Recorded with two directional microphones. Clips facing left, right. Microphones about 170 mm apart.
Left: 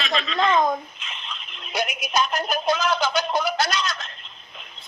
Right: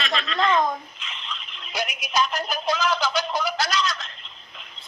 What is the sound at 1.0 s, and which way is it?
Music, 45° left (ahead or behind).